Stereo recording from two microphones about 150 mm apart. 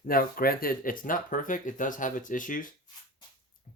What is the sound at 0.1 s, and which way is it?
Speech, 75° left (ahead or behind).